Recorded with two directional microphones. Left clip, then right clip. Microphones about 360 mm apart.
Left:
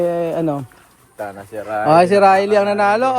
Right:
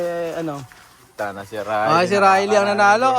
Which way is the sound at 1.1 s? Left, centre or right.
Right.